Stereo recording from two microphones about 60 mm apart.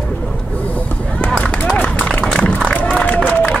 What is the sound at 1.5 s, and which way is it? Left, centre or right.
Run, left.